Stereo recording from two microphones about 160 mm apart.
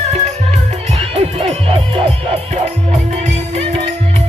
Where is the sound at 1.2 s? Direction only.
40° right (ahead or behind).